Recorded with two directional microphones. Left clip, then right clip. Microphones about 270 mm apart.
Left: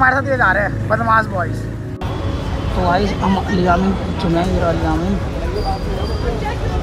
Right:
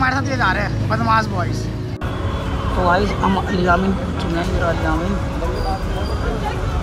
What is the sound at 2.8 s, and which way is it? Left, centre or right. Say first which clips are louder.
Speech: even; centre.